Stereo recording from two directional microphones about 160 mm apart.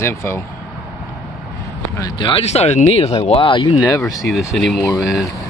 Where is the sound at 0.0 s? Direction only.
15° left (ahead or behind).